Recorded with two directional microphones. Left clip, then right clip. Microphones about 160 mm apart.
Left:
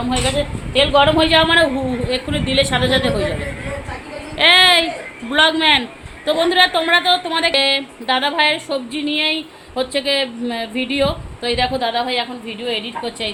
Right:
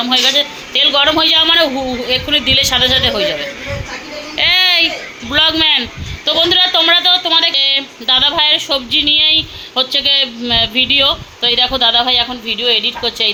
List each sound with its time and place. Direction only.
0.1 s a man's voice: centre (ahead or behind)
4.4 s a woman's voice: 10° left (ahead or behind); by 13.3 s 20° right (ahead or behind)